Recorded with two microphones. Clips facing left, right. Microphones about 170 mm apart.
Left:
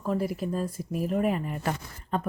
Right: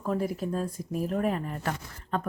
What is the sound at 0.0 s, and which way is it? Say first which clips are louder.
Speech: left 1 dB; 5° left (ahead or behind).